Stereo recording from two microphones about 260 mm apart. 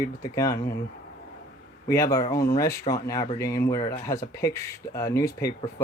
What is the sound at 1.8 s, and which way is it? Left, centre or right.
Speech, centre.